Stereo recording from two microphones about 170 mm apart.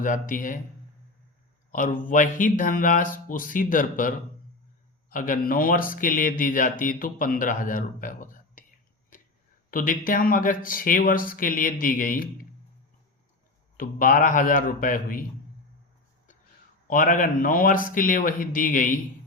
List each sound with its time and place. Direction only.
0.0 s a man's voice: 50° left (ahead or behind)
1.7 s a man's voice: 50° left (ahead or behind)
9.6 s speech: 55° left (ahead or behind)
13.7 s speech: 55° left (ahead or behind)
16.8 s a man's voice: 50° left (ahead or behind)